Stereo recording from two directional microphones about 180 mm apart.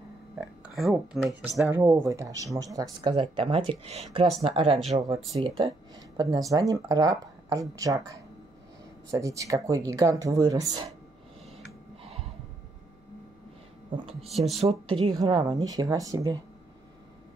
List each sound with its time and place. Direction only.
0.7 s speech: centre (ahead or behind)
1.7 s speech: 15° right (ahead or behind)
12.0 s a sound: 35° right (ahead or behind)
14.3 s speech: 35° right (ahead or behind); by 16.3 s 20° right (ahead or behind)